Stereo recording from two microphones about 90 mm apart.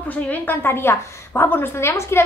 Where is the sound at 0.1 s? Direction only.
20° left (ahead or behind).